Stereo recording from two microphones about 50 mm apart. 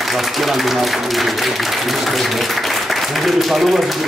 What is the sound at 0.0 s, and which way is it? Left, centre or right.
Speech, centre.